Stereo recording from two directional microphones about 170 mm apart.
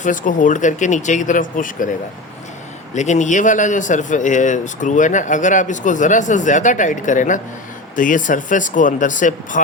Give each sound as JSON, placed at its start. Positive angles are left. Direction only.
{"t": 0.0, "sound": "a man's voice", "side_deg": 50}